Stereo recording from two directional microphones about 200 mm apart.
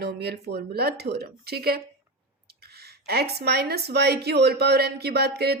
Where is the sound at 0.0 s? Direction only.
55° right (ahead or behind).